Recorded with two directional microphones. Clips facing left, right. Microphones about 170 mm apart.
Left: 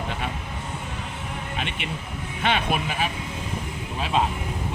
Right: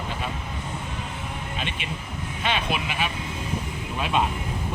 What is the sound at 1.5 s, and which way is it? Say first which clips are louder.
Speech: left 2 dB; 60° left (ahead or behind).